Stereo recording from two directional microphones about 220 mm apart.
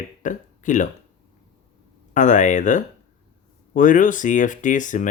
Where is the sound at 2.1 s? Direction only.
35° left (ahead or behind).